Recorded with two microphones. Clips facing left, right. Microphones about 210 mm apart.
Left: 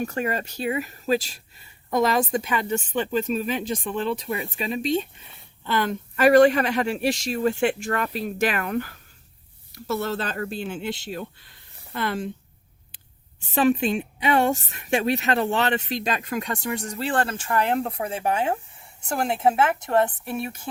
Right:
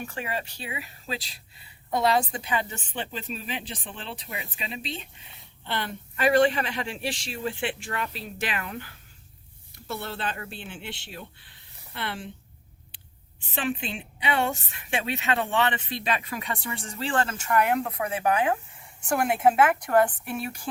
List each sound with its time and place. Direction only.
0.0 s speech: 45° left (ahead or behind)
6.1 s speech: 45° left (ahead or behind)
10.0 s a woman's voice: 40° left (ahead or behind)
13.4 s a woman's voice: 40° left (ahead or behind); by 20.1 s 25° left (ahead or behind)